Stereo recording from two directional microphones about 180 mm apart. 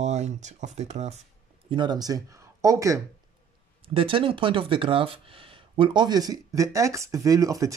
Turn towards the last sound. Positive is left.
turn(degrees=-20)  # may be behind; listen again after turning